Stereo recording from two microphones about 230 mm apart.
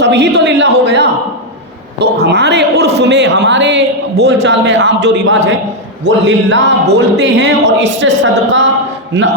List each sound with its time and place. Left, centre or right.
0.0 s a man's voice: right